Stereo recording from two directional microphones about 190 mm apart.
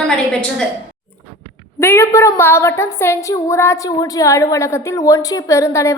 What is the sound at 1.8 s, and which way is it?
A woman's voice, 15° left (ahead or behind).